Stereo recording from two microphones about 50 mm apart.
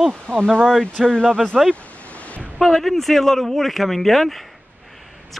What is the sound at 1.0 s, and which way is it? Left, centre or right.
Speech, centre.